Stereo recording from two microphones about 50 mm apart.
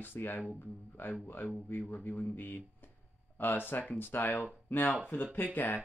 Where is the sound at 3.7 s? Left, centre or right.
Left.